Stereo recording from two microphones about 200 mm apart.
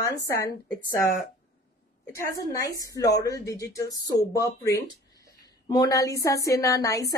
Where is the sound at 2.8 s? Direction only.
15° left (ahead or behind).